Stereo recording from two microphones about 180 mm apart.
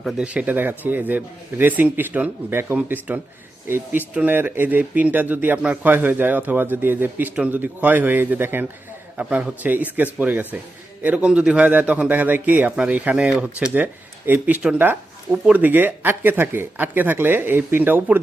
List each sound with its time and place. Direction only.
0.0 s a man's voice: 5° right (ahead or behind)